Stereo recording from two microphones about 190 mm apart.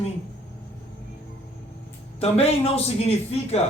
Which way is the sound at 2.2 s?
35° left (ahead or behind).